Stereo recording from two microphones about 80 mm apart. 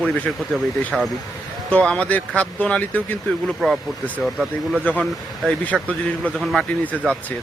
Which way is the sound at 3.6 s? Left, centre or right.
Centre.